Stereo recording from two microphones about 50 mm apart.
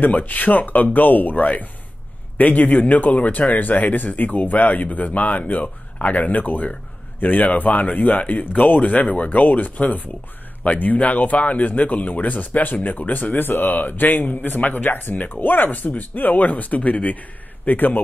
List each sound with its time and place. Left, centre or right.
0.0 s speech: left